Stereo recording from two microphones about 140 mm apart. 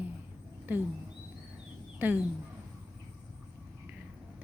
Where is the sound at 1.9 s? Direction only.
10° right (ahead or behind).